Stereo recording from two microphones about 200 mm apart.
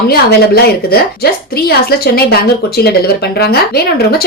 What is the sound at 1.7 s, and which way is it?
A woman's voice, 50° left (ahead or behind).